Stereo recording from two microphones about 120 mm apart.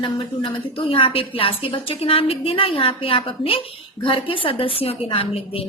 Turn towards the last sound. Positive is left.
turn(degrees=50)  # may be behind; listen again after turning